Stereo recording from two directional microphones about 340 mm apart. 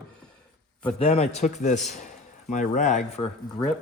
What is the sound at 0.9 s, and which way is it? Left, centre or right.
A man's voice, centre.